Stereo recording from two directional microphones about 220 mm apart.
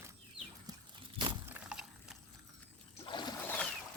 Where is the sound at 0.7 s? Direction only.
15° right (ahead or behind).